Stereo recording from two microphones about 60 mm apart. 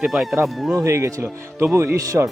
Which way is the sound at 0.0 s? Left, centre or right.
Centre.